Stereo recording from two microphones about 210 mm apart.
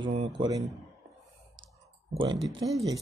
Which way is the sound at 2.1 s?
25° right (ahead or behind).